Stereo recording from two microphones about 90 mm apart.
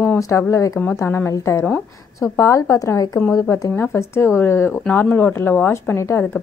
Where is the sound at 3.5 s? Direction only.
30° left (ahead or behind).